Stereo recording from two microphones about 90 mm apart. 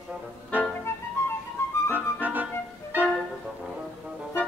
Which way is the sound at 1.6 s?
30° left (ahead or behind).